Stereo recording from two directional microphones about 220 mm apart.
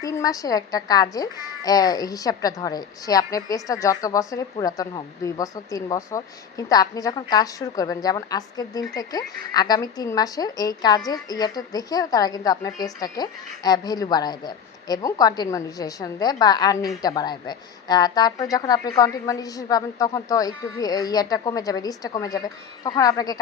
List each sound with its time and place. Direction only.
0.0 s a woman's voice: 15° left (ahead or behind)